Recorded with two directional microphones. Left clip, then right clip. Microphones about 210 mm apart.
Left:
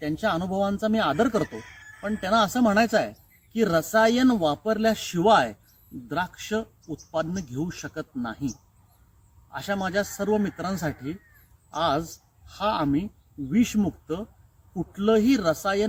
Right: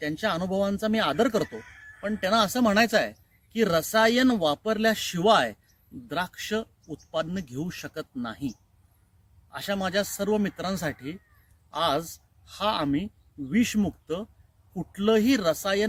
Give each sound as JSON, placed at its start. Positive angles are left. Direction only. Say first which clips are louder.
{"t": 0.0, "sound": "speech", "louder": "left 2 dB", "side_deg": -15}